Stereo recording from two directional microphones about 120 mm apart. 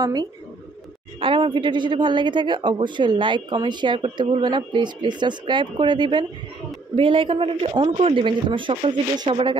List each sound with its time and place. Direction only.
0.0 s speech: 35° right (ahead or behind)
1.2 s speech: 45° right (ahead or behind)